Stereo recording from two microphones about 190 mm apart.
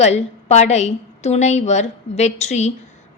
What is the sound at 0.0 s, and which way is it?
A woman's voice, 35° left (ahead or behind).